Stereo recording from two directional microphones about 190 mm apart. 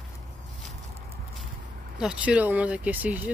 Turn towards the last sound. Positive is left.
turn(degrees=-10)  # may be behind; listen again after turning